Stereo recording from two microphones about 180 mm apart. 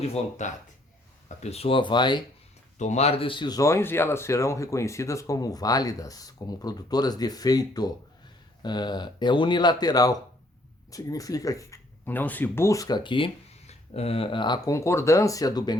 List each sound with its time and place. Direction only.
0.1 s speech: 40° left (ahead or behind); by 2.2 s 25° left (ahead or behind)
2.7 s speech: 40° left (ahead or behind); by 15.7 s 20° left (ahead or behind)